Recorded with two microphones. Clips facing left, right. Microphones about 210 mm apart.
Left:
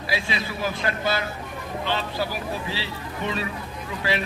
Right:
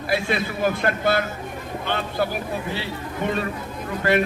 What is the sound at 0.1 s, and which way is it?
A man's voice, 55° right (ahead or behind).